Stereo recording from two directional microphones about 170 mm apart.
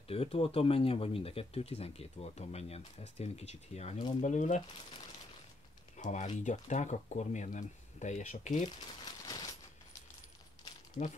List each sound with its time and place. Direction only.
0.1 s speech: 35° left (ahead or behind)
4.2 s speech: 45° left (ahead or behind)
5.9 s speech: 45° left (ahead or behind)
8.6 s crumpling: 25° left (ahead or behind)
11.0 s speech: 50° left (ahead or behind)